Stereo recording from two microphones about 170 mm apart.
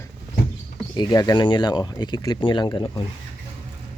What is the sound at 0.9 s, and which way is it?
Speech, 25° left (ahead or behind).